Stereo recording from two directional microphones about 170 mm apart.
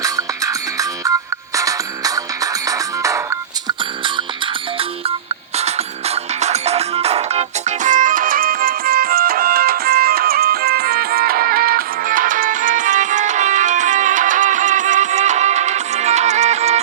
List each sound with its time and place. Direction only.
0.0 s music: 20° right (ahead or behind)
5.5 s music: 40° right (ahead or behind)
7.9 s music: 50° right (ahead or behind)